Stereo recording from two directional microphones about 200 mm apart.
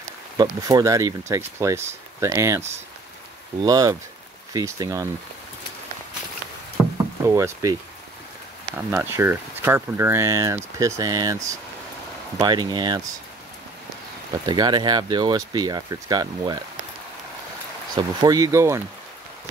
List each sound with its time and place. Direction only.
0.4 s speech: 15° right (ahead or behind)
3.6 s speech: 20° right (ahead or behind)
7.2 s speech: 15° right (ahead or behind)
8.7 s speech: 10° right (ahead or behind)
14.4 s speech: 20° right (ahead or behind)
17.9 s speech: 20° right (ahead or behind)